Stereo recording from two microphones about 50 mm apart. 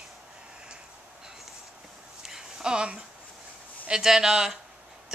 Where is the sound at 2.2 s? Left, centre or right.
Centre.